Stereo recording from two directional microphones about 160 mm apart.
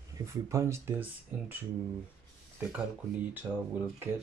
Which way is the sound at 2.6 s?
10° right (ahead or behind).